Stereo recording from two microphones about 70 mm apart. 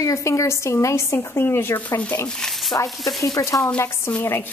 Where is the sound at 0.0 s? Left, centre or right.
Left.